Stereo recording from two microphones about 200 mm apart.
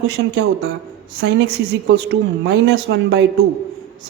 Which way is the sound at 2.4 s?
65° right (ahead or behind).